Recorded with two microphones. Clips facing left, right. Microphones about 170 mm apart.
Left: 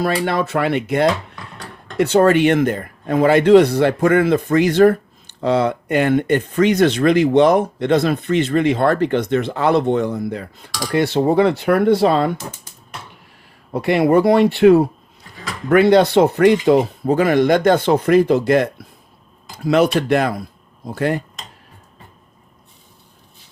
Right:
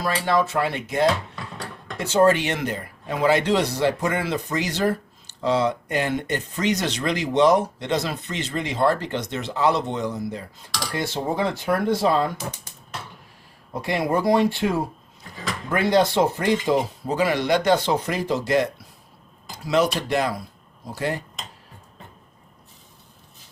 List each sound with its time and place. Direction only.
0.0 s speech: 65° left (ahead or behind)
13.7 s speech: 65° left (ahead or behind)